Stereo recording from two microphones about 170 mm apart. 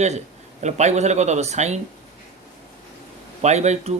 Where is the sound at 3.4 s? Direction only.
40° right (ahead or behind).